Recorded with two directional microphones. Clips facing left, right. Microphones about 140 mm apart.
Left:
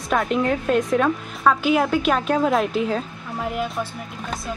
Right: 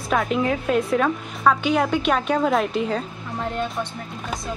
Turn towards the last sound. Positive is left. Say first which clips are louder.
# left 1 dB
turn(degrees=5)  # may be behind; listen again after turning